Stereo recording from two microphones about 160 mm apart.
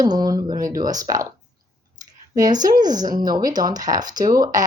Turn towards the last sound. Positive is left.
turn(degrees=-25)  # may be behind; listen again after turning